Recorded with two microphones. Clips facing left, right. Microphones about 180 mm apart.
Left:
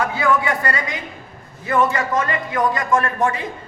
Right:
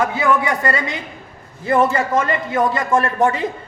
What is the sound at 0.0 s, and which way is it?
A man's voice, 25° right (ahead or behind).